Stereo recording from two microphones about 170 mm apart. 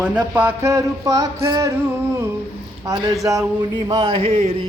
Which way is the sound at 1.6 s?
15° right (ahead or behind).